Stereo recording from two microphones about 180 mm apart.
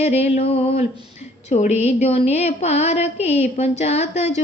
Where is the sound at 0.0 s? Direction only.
35° left (ahead or behind).